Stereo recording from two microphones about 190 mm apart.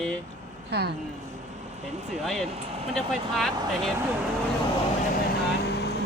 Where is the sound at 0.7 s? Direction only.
55° right (ahead or behind).